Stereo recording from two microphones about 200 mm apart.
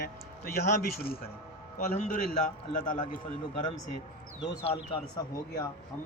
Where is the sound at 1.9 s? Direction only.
45° left (ahead or behind).